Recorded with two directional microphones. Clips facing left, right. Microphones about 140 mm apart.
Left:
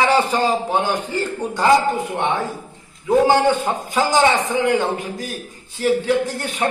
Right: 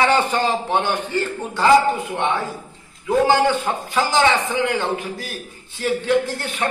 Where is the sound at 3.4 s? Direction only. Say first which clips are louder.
Left 2 dB; 15° left (ahead or behind).